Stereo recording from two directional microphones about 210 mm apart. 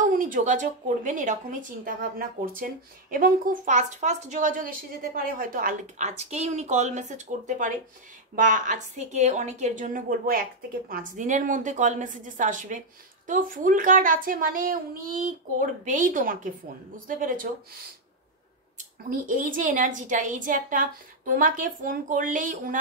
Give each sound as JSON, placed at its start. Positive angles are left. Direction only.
{"t": 0.1, "sound": "speech", "side_deg": -40}
{"t": 19.0, "sound": "speech", "side_deg": -40}